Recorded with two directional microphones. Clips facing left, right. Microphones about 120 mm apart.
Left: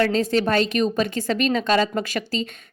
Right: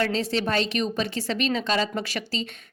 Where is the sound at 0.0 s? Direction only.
45° left (ahead or behind).